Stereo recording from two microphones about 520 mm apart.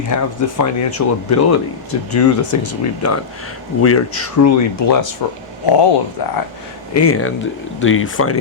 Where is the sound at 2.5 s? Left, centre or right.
Left.